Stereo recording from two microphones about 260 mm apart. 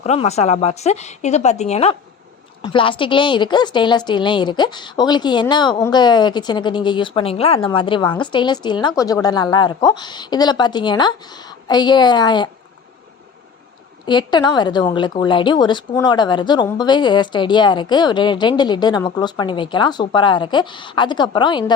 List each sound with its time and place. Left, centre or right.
0.0 s a woman's voice: left
14.0 s a woman's voice: centre